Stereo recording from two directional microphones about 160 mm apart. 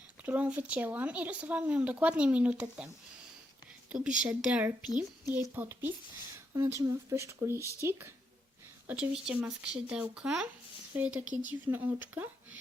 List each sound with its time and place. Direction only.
0.2 s a woman's voice: 10° right (ahead or behind)
9.2 s speech: 5° right (ahead or behind)